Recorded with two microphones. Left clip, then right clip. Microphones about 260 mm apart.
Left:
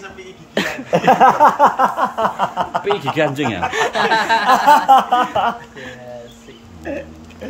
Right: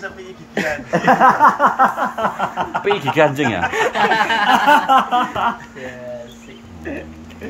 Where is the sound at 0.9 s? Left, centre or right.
Left.